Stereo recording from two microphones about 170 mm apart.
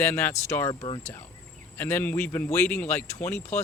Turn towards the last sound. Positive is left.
turn(degrees=15)  # may be behind; listen again after turning